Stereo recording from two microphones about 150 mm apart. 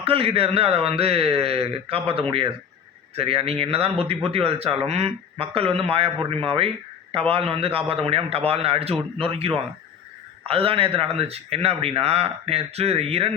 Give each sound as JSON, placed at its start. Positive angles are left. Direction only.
{"t": 0.0, "sound": "speech", "side_deg": -40}